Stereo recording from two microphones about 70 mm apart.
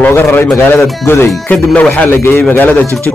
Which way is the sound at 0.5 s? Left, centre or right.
Left.